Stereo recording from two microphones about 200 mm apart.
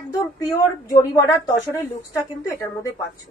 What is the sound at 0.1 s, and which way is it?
Speech, 20° left (ahead or behind).